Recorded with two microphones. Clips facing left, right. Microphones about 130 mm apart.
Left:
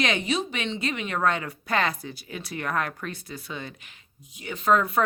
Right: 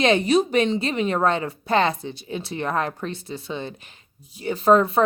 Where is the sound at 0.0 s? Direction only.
35° right (ahead or behind).